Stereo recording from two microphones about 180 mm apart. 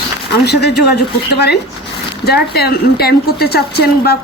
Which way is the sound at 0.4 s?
70° left (ahead or behind).